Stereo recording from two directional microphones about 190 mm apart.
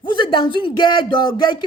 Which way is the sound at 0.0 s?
25° left (ahead or behind).